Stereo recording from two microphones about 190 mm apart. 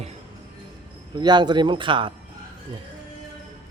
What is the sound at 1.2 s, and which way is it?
Speech, 20° right (ahead or behind).